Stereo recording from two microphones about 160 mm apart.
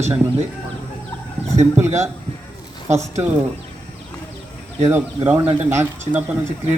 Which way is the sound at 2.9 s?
15° right (ahead or behind).